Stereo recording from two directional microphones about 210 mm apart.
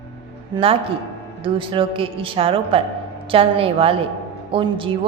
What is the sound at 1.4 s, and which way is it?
A woman's voice, 25° right (ahead or behind).